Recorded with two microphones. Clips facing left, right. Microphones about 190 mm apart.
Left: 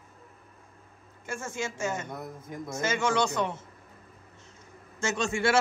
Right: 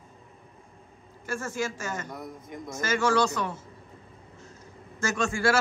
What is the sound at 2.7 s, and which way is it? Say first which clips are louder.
Speech: right 2 dB; 20° left (ahead or behind).